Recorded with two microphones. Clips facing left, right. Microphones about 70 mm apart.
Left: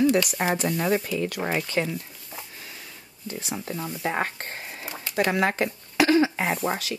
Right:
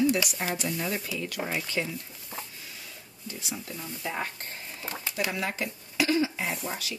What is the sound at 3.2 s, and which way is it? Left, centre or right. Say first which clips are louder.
Speech: left 6 dB; left.